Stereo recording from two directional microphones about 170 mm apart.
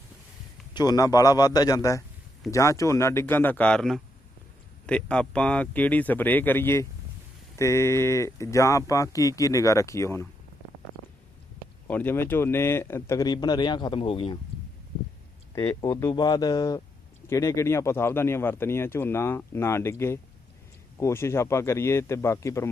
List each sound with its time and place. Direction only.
0.7 s a man's voice: 25° left (ahead or behind)
11.9 s speech: 10° left (ahead or behind); by 14.3 s 30° left (ahead or behind)
15.6 s a man's voice: 15° left (ahead or behind)